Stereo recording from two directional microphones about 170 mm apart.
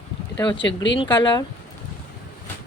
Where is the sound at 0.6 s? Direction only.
90° left.